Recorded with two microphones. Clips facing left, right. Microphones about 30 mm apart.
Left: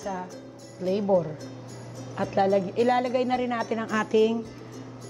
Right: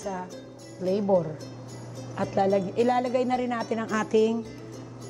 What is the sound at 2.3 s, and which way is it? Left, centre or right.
A woman's voice, centre.